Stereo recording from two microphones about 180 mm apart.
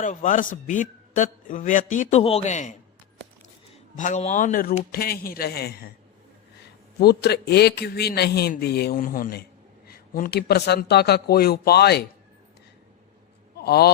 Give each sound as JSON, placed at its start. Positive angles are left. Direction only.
{"t": 0.0, "sound": "a man's voice", "side_deg": 45}
{"t": 3.9, "sound": "a man's voice", "side_deg": 40}
{"t": 7.0, "sound": "a man's voice", "side_deg": 65}
{"t": 13.6, "sound": "a sound", "side_deg": 60}